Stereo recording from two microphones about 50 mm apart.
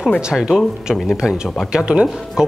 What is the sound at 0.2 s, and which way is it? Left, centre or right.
Speech, centre.